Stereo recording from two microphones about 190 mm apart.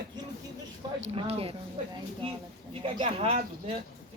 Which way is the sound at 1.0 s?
30° right (ahead or behind).